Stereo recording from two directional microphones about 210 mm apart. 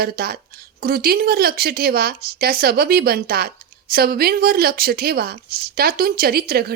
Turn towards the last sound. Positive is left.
turn(degrees=-45)  # may be behind; listen again after turning